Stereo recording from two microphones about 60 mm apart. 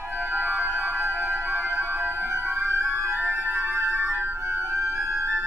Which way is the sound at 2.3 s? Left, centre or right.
Right.